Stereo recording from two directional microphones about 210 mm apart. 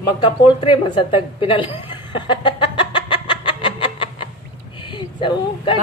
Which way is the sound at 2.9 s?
25° left (ahead or behind).